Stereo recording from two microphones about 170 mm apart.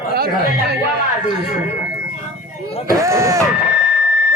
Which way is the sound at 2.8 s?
15° right (ahead or behind).